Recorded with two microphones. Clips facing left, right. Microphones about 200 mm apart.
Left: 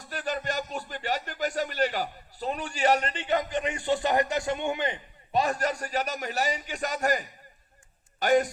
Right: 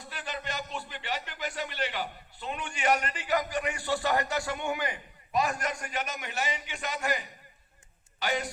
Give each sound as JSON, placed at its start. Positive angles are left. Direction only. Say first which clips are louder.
{"t": 0.0, "sound": "a man's voice", "louder": "left 6 dB", "side_deg": 45}